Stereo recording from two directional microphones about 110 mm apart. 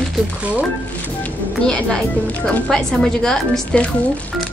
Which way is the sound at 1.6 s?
10° left (ahead or behind).